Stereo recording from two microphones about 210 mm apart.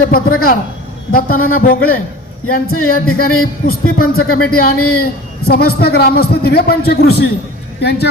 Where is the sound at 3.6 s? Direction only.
40° left (ahead or behind).